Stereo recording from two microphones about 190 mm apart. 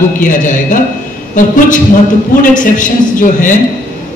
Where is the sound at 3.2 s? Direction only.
45° left (ahead or behind).